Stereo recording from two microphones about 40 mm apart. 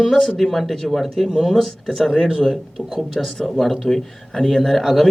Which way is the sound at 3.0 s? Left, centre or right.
Centre.